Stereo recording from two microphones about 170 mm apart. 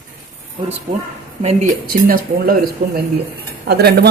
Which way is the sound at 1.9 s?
60° right (ahead or behind).